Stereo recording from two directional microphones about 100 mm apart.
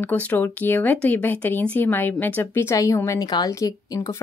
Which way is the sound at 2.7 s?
35° left (ahead or behind).